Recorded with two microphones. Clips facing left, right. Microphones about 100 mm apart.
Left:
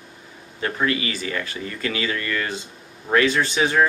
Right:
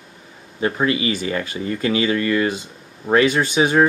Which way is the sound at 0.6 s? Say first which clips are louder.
Right 4 dB; 20° right (ahead or behind).